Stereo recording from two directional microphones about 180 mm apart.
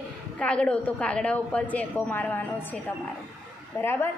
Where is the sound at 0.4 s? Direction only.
5° left (ahead or behind).